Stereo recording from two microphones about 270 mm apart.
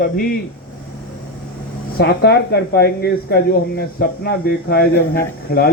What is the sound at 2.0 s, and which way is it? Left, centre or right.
Speech, left.